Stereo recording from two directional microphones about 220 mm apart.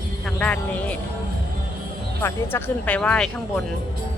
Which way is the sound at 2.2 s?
10° left (ahead or behind).